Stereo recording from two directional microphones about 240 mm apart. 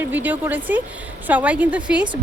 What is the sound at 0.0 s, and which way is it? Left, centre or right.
A woman's voice, centre.